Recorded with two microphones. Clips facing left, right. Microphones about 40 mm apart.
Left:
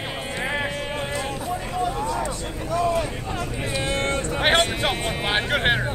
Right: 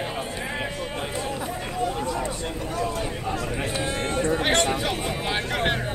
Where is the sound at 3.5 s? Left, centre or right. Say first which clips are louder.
Even; right.